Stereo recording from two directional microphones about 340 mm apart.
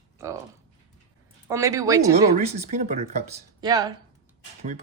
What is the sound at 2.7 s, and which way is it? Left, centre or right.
Speech, centre.